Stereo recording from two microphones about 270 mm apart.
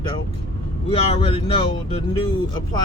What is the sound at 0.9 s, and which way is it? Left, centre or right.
Speech, left.